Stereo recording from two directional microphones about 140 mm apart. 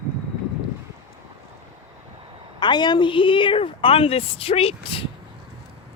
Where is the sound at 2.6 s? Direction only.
30° left (ahead or behind).